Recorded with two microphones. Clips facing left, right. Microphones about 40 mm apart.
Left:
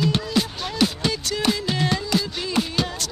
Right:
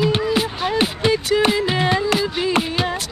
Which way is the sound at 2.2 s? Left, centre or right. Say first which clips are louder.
Right 8 dB; right.